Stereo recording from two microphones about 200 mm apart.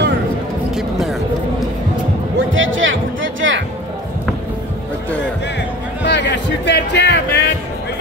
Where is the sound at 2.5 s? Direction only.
75° right (ahead or behind).